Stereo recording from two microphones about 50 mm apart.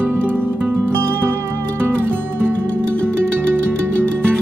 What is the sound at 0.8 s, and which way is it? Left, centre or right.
Music, right.